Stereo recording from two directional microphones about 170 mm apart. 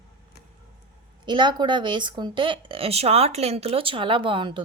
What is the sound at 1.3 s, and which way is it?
Speech, 25° right (ahead or behind).